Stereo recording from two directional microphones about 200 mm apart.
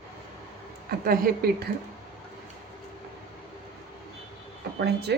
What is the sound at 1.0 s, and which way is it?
Speech, 45° right (ahead or behind).